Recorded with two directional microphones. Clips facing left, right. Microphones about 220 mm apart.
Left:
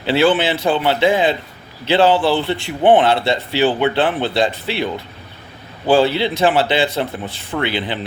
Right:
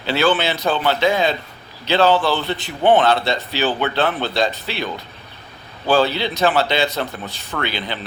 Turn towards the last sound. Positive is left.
turn(degrees=25)  # may be behind; listen again after turning